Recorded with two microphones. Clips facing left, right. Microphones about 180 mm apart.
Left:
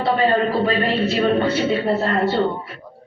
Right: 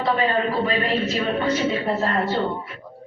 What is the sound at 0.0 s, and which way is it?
Speech, 40° left (ahead or behind).